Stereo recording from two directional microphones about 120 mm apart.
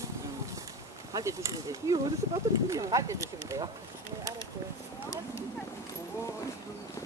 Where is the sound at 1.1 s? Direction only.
25° right (ahead or behind).